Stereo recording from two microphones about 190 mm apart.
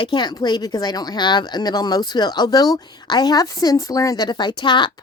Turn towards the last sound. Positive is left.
turn(degrees=25)  # may be behind; listen again after turning